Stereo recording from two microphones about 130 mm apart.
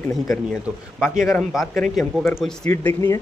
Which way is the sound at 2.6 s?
15° left (ahead or behind).